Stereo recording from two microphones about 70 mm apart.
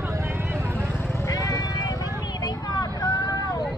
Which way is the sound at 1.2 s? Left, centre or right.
Left.